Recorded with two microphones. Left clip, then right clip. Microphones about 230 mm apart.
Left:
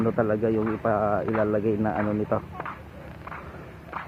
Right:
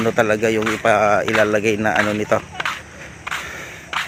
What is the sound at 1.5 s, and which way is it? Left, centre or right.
Speech, right.